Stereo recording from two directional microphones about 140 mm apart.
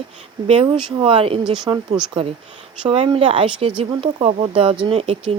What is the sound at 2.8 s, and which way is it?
Speech, 40° right (ahead or behind).